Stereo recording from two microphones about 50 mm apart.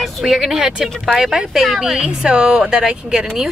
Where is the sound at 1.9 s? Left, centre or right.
Centre.